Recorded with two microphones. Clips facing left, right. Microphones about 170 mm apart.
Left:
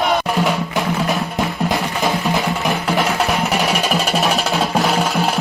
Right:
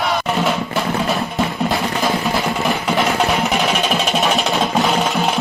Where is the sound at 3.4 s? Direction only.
5° left (ahead or behind).